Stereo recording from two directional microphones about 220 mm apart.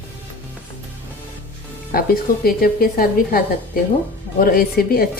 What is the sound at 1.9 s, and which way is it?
A woman's voice, 45° left (ahead or behind).